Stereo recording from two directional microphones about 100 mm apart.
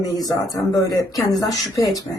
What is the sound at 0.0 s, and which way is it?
Speech, 35° left (ahead or behind).